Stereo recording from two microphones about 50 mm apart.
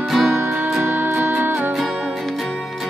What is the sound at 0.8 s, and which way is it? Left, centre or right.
Music, right.